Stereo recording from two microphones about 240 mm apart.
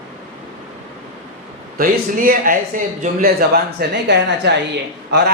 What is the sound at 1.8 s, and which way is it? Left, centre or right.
Speech, right.